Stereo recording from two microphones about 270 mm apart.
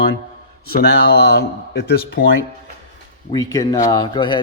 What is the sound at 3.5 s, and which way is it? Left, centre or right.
Speech, centre.